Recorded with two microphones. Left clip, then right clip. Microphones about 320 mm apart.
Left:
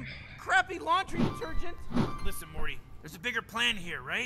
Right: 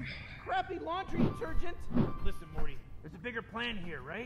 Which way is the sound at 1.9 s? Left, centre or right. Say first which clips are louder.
Left 2 dB; left.